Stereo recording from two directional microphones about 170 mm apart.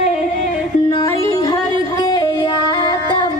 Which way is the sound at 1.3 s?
20° left (ahead or behind).